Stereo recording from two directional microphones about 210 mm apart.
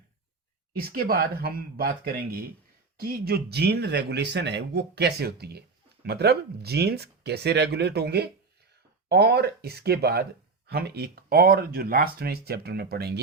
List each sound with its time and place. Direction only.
0.7 s speech: 45° right (ahead or behind)